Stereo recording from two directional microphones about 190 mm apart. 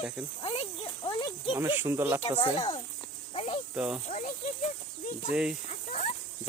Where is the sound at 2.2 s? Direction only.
25° left (ahead or behind).